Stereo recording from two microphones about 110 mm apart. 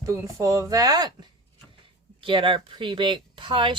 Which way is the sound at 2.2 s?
50° right (ahead or behind).